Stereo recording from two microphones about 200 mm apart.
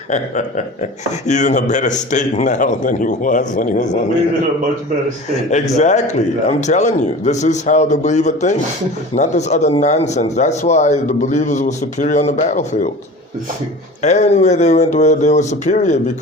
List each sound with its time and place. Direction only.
0.1 s speech: 35° left (ahead or behind)
5.3 s speech: 35° left (ahead or behind)
14.0 s speech: 35° left (ahead or behind)